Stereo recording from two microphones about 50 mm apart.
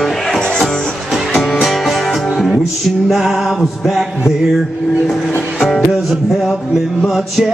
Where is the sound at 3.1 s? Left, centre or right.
Centre.